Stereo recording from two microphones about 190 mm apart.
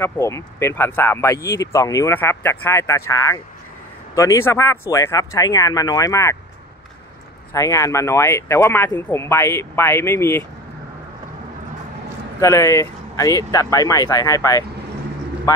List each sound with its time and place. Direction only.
0.0 s speech: 15° left (ahead or behind)
7.5 s speech: 15° left (ahead or behind)
12.4 s speech: 15° left (ahead or behind)